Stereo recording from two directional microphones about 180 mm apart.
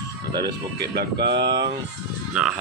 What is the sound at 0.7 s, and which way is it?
Speech, 65° right (ahead or behind).